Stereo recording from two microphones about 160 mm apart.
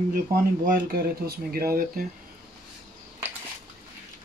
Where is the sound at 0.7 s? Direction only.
70° right (ahead or behind).